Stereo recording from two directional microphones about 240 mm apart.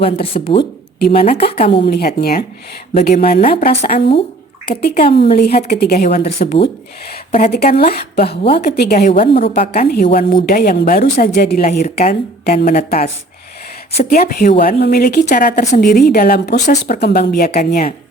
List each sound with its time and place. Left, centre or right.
0.0 s speech: left
0.9 s a woman's voice: left
6.1 s a woman's voice: left